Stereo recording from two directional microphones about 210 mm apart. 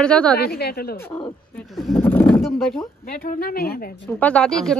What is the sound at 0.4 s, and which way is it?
Speech, 50° left (ahead or behind).